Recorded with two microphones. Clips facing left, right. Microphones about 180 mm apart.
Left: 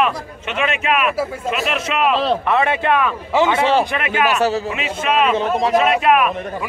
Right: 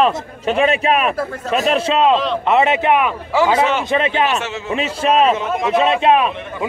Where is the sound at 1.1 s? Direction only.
10° left (ahead or behind).